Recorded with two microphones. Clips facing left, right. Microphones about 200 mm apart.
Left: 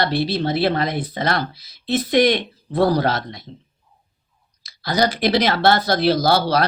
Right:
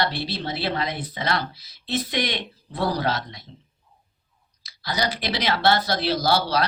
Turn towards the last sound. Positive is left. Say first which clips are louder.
# left 4 dB
turn(degrees=50)  # may be behind; listen again after turning